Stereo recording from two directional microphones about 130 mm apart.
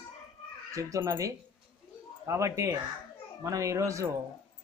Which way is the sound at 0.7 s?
25° right (ahead or behind).